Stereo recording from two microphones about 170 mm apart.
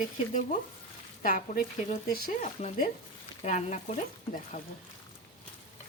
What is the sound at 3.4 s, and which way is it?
Frying, 40° left (ahead or behind).